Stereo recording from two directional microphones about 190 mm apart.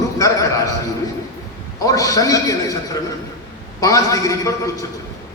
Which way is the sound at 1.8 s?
15° left (ahead or behind).